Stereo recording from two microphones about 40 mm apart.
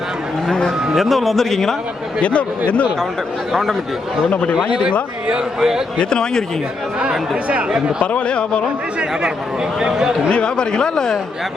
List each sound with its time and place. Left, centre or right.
0.9 s a man's voice: centre
2.2 s speech: left
5.5 s speech: centre
6.0 s speech: centre
8.0 s speech: left
10.2 s speech: left